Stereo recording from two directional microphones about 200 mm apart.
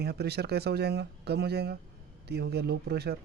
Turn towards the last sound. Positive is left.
turn(degrees=-55)  # may be behind; listen again after turning